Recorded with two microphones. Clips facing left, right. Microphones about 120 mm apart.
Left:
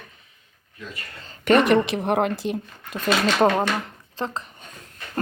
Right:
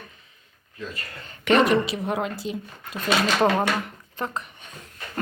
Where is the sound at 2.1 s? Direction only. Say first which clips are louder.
Left 5 dB; 60° left (ahead or behind).